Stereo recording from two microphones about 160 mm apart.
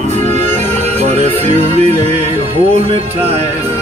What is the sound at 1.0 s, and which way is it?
Music, 45° right (ahead or behind).